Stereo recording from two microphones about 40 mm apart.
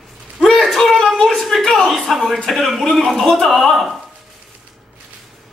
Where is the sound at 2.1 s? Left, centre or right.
Centre.